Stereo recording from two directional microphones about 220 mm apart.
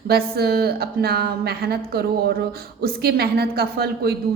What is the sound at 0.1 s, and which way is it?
A woman's voice, 45° right (ahead or behind).